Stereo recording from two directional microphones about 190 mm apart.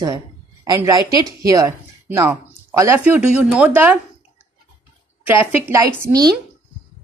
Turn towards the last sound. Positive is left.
turn(degrees=-20)  # may be behind; listen again after turning